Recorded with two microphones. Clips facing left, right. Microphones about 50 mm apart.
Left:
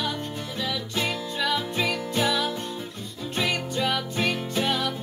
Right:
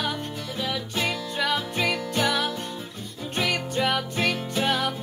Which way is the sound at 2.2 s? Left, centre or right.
Right.